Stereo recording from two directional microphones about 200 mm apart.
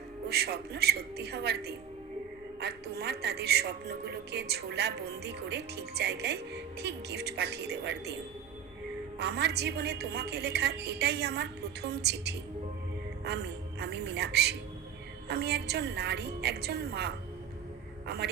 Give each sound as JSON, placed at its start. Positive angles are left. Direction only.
{"t": 0.3, "sound": "a woman's voice", "side_deg": -55}
{"t": 9.1, "sound": "a woman's voice", "side_deg": -55}